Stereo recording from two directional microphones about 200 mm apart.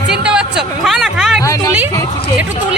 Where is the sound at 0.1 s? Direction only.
5° right (ahead or behind).